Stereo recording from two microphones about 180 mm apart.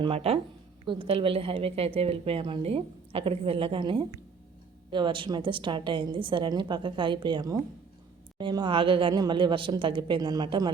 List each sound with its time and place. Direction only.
0.0 s a woman's voice: 30° right (ahead or behind)